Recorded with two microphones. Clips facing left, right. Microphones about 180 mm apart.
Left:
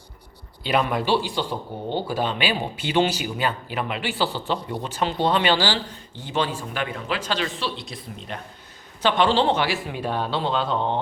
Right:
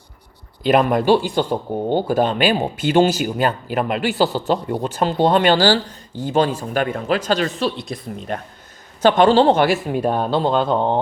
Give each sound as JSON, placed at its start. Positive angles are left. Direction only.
{"t": 0.6, "sound": "speech", "side_deg": -50}